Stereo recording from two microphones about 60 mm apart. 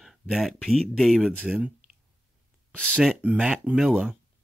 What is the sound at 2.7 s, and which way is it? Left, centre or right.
Speech, left.